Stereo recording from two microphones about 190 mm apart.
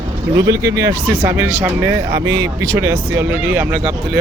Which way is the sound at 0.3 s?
20° right (ahead or behind).